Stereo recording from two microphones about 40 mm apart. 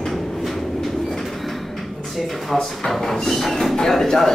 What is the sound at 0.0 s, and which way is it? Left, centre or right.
Train, centre.